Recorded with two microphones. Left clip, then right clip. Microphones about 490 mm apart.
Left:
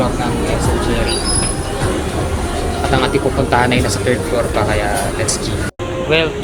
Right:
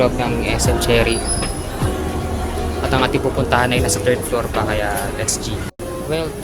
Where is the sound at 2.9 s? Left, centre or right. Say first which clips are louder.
Left 2 dB; right.